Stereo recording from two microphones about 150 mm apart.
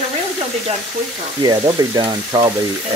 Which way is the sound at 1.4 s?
30° right (ahead or behind).